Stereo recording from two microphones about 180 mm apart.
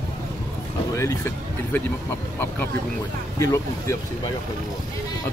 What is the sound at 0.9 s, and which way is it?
Speech, 15° left (ahead or behind).